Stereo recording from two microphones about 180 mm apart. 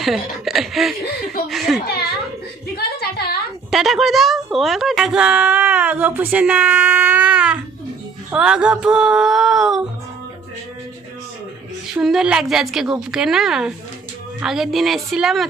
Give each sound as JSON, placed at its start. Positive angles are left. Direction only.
{"t": 0.0, "sound": "a woman's voice", "side_deg": 0}
{"t": 2.7, "sound": "a sound", "side_deg": 60}
{"t": 3.7, "sound": "a woman's voice", "side_deg": 0}
{"t": 11.9, "sound": "a woman's voice", "side_deg": -5}